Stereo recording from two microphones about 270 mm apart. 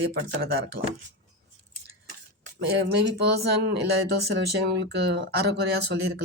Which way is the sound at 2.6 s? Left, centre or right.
Right.